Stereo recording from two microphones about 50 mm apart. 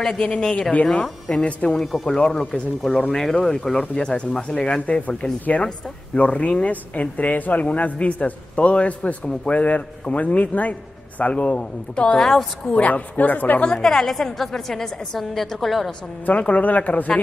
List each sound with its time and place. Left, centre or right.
0.1 s speech: left
2.0 s speech: centre
3.9 s speech: left
12.2 s a woman's voice: centre
12.7 s speech: left
13.7 s a woman's voice: centre
16.3 s speech: left